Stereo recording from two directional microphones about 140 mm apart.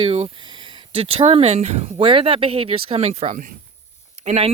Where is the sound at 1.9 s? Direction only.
40° right (ahead or behind).